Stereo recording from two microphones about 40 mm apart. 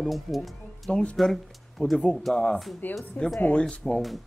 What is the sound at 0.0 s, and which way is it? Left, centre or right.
Speech, centre.